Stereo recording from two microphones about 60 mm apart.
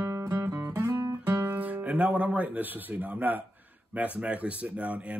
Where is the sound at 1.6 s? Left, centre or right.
Right.